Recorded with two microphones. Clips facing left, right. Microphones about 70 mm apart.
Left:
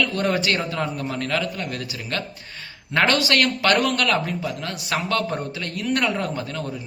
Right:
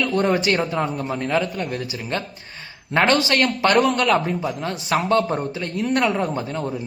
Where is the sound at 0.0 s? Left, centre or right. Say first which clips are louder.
Right 3 dB; right.